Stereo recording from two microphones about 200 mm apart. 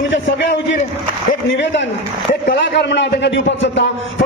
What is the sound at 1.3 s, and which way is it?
A man's voice, 65° left (ahead or behind).